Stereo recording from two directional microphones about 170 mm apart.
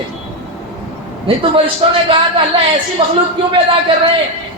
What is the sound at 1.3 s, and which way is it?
Speech, 35° right (ahead or behind).